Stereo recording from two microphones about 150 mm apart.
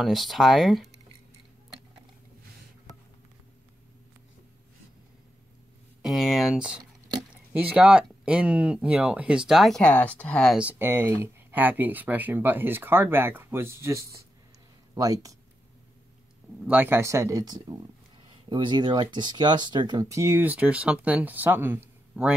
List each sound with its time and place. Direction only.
0.0 s speech: centre (ahead or behind)
6.0 s speech: centre (ahead or behind)
10.6 s speech: 15° right (ahead or behind)
16.6 s speech: 10° right (ahead or behind)